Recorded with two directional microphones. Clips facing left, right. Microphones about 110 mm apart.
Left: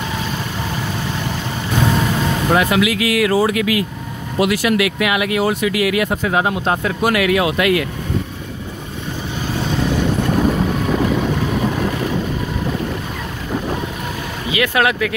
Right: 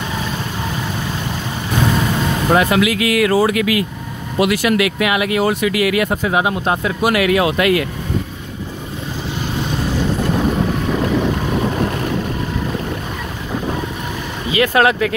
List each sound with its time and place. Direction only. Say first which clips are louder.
2.5 s speech: right 2 dB; 35° right (ahead or behind); by 4.7 s 60° right (ahead or behind)
4.7 s speech: right 1 dB; 35° right (ahead or behind)
5.4 s speech: right 1 dB; 60° right (ahead or behind)
6.0 s speech: right 1 dB; 20° right (ahead or behind)
6.5 s speech: even; 5° right (ahead or behind)
7.2 s speech: right 3 dB; 35° right (ahead or behind)
14.5 s speech: right 3 dB; 35° right (ahead or behind)